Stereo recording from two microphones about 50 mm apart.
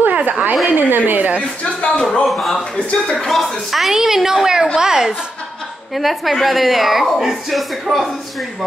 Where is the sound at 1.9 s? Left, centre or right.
Centre.